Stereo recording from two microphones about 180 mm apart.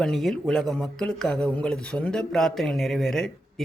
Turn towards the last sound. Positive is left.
turn(degrees=0)  # may be behind; listen again after turning